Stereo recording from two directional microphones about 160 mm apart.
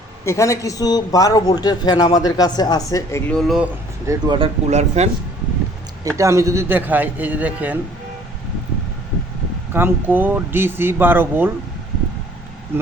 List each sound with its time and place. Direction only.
0.3 s speech: 20° left (ahead or behind)
3.2 s speech: centre (ahead or behind)
4.0 s speech: 20° right (ahead or behind)
4.4 s speech: 45° right (ahead or behind)
6.1 s speech: 20° right (ahead or behind)
9.7 s speech: 15° right (ahead or behind)